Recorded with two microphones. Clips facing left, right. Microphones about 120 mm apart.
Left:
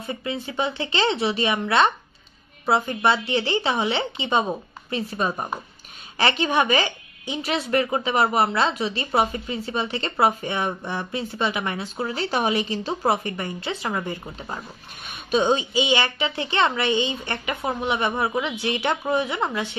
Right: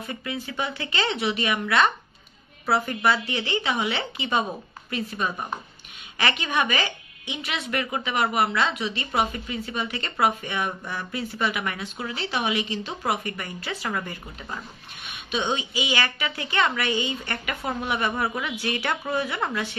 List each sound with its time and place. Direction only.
0.0 s a woman's voice: 25° left (ahead or behind)
15.0 s a woman's voice: 35° left (ahead or behind); by 19.8 s 20° left (ahead or behind)